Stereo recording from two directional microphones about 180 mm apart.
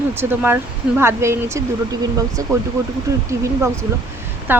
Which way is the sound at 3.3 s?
15° right (ahead or behind).